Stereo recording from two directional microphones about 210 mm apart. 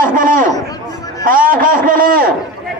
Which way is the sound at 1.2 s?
40° right (ahead or behind).